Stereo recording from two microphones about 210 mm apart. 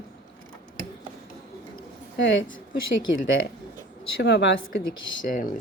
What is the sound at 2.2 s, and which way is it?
Speech, 60° left (ahead or behind).